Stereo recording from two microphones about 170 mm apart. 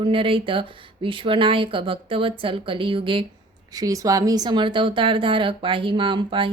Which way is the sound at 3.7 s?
20° right (ahead or behind).